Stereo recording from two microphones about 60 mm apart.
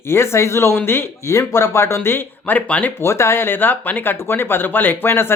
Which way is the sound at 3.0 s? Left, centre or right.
Left.